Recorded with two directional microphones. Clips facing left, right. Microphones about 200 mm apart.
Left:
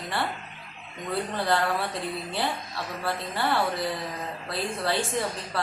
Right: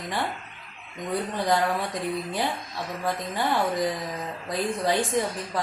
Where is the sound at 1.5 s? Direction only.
15° right (ahead or behind).